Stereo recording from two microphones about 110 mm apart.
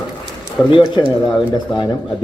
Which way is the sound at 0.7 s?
50° left (ahead or behind).